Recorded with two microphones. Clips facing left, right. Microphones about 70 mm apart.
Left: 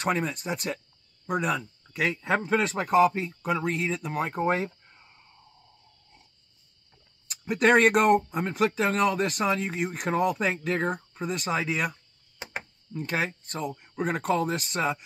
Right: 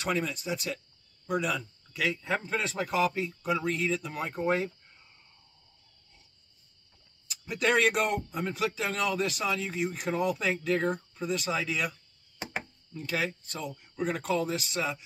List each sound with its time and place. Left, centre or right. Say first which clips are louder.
0.0 s speech: left 3 dB; left
7.2 s speech: left 6 dB; left